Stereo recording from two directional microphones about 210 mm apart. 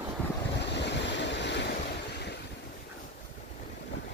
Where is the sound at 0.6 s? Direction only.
55° left (ahead or behind).